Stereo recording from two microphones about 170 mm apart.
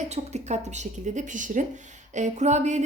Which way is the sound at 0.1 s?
40° right (ahead or behind).